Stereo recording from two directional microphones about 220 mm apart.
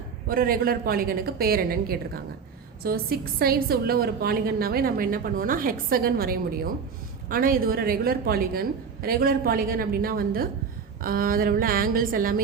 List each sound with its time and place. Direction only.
0.3 s a woman's voice: 40° right (ahead or behind)